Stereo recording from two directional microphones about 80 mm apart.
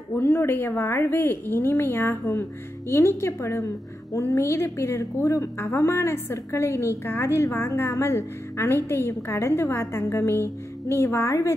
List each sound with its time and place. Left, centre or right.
0.1 s a woman's voice: left